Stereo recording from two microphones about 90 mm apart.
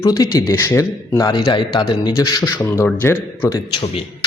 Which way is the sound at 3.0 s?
25° left (ahead or behind).